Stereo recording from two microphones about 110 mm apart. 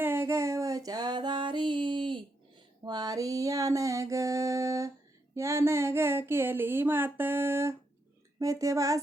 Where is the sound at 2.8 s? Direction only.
35° right (ahead or behind).